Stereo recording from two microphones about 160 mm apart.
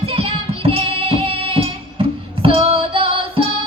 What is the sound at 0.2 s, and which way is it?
Music, 35° right (ahead or behind).